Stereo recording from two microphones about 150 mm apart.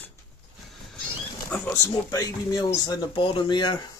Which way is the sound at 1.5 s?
15° left (ahead or behind).